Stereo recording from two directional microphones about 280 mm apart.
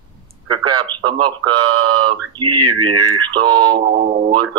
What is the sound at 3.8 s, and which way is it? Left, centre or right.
Speech, right.